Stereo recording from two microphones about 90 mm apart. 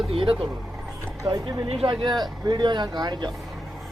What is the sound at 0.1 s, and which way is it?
Speech, 90° right.